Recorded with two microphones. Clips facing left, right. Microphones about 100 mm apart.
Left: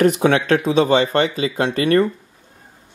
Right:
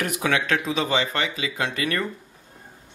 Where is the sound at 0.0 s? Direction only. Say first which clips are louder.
Left 9 dB; 35° left (ahead or behind).